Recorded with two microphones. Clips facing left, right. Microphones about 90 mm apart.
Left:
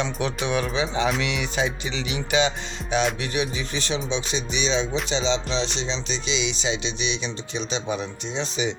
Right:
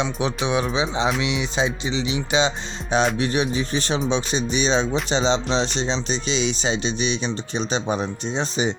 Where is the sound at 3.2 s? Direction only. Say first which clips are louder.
Right 5 dB; 40° right (ahead or behind).